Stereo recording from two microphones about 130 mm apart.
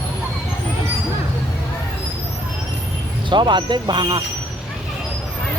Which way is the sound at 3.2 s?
35° right (ahead or behind).